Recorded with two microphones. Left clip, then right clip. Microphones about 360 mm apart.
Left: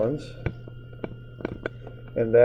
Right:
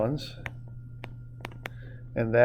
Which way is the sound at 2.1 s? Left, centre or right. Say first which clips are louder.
Left 5 dB; right.